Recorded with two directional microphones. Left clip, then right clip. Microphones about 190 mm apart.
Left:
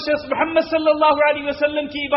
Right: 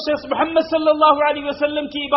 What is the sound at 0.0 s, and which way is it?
A man's voice, 30° right (ahead or behind).